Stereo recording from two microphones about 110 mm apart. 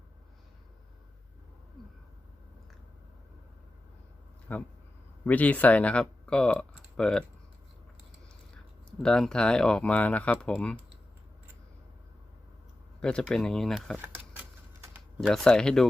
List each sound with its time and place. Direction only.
4.5 s speech: 15° left (ahead or behind)
9.0 s speech: 5° left (ahead or behind)
13.0 s speech: 10° left (ahead or behind)
13.9 s a sound: 15° right (ahead or behind)
15.2 s speech: 5° left (ahead or behind)